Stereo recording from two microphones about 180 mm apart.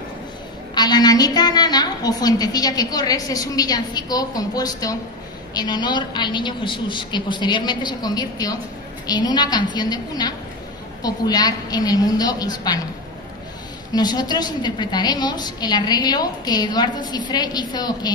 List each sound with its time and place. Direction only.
0.7 s a woman's voice: 20° left (ahead or behind)
13.9 s a woman's voice: 20° left (ahead or behind)